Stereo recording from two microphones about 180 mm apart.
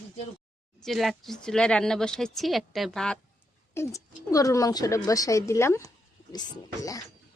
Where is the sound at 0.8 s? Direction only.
Centre (ahead or behind).